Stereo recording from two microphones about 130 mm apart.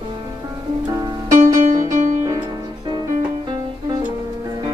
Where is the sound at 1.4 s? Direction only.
85° right.